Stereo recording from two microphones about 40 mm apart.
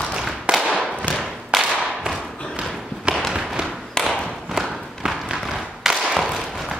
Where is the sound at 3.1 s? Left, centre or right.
Right.